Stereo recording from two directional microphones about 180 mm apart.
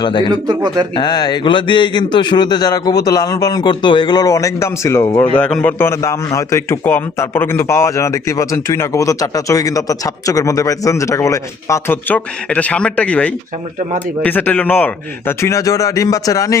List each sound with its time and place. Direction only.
0.0 s a man's voice: 25° left (ahead or behind)
0.3 s a man's voice: 25° right (ahead or behind)
0.9 s a man's voice: 20° left (ahead or behind)
5.4 s a man's voice: 5° left (ahead or behind)